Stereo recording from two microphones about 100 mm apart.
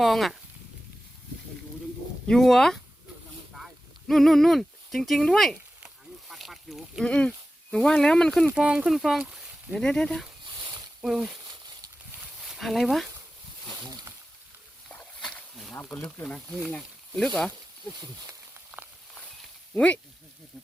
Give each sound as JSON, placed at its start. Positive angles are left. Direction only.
{"t": 0.0, "sound": "speech", "side_deg": 0}
{"t": 2.2, "sound": "speech", "side_deg": 5}
{"t": 3.5, "sound": "a sound", "side_deg": 0}
{"t": 7.1, "sound": "speech", "side_deg": 10}
{"t": 8.5, "sound": "speech", "side_deg": -10}
{"t": 9.7, "sound": "speech", "side_deg": 5}
{"t": 10.4, "sound": "a sound", "side_deg": -50}
{"t": 11.0, "sound": "speech", "side_deg": -5}
{"t": 12.5, "sound": "speech", "side_deg": 0}
{"t": 14.8, "sound": "wild animals", "side_deg": 10}
{"t": 15.8, "sound": "speech", "side_deg": 10}
{"t": 18.7, "sound": "walk", "side_deg": -20}
{"t": 19.7, "sound": "speech", "side_deg": 10}